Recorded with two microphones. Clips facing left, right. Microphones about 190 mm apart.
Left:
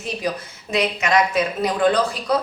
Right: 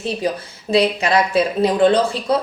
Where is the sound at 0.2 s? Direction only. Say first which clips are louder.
Right 4 dB; 30° right (ahead or behind).